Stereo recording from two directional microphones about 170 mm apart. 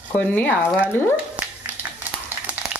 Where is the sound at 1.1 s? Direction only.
10° right (ahead or behind).